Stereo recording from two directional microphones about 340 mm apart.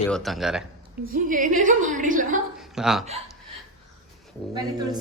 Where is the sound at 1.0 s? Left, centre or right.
Right.